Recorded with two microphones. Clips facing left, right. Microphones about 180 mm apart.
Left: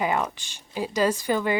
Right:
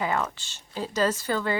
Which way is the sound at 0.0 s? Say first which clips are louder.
Left 2 dB; 15° left (ahead or behind).